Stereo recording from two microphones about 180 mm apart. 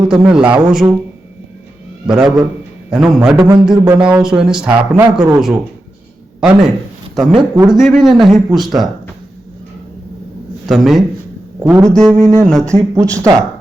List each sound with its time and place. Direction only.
0.1 s speech: 5° right (ahead or behind)
2.0 s speech: 5° right (ahead or behind)
3.7 s a sound: 5° right (ahead or behind)
4.2 s speech: 5° right (ahead or behind)
7.2 s speech: centre (ahead or behind)
7.5 s speech: 20° right (ahead or behind)
7.8 s speech: centre (ahead or behind)
10.7 s speech: centre (ahead or behind)
11.6 s a sound: 15° right (ahead or behind)
11.9 s speech: 5° left (ahead or behind)
12.2 s a sound: 15° right (ahead or behind)